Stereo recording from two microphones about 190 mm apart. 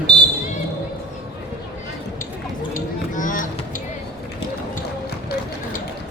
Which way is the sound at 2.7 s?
45° left (ahead or behind).